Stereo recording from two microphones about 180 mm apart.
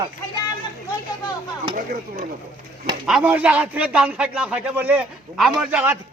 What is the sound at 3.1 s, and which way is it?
A man's voice, 5° right (ahead or behind).